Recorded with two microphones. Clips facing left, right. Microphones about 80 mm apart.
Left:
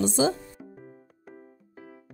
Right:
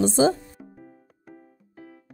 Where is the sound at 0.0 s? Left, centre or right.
Right.